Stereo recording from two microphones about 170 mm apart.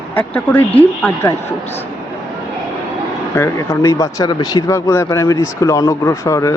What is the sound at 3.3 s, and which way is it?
Speech, 15° left (ahead or behind).